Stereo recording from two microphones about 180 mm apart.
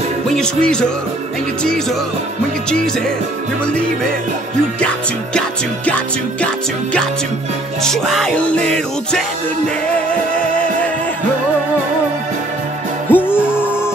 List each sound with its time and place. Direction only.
0.4 s music: 5° left (ahead or behind)
6.4 s music: 5° left (ahead or behind)
13.1 s music: 10° left (ahead or behind)